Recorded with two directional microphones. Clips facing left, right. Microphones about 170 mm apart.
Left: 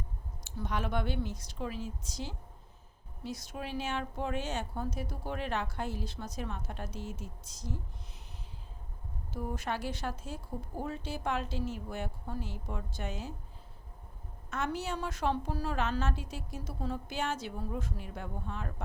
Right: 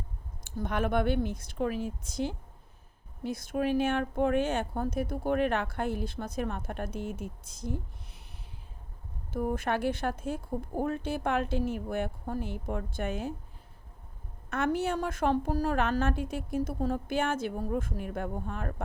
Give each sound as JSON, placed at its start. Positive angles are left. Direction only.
{"t": 0.4, "sound": "speech", "side_deg": -55}
{"t": 9.3, "sound": "speech", "side_deg": -55}
{"t": 14.5, "sound": "a woman's voice", "side_deg": -55}